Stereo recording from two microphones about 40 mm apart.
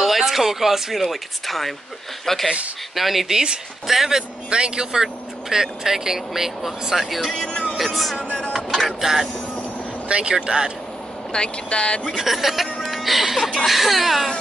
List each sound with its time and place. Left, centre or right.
0.0 s speech: centre
1.0 s speech: centre
3.3 s speech: centre
4.5 s speech: right
5.0 s speech: centre
8.3 s music: left
9.0 s speech: centre
10.0 s speech: right
11.3 s speech: left
12.2 s speech: centre